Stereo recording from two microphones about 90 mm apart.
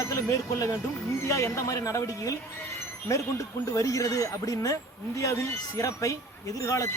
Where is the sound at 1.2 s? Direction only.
35° left (ahead or behind).